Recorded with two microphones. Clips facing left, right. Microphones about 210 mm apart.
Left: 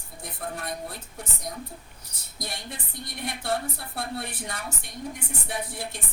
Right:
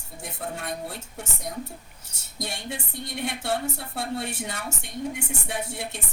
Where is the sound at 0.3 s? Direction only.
25° right (ahead or behind).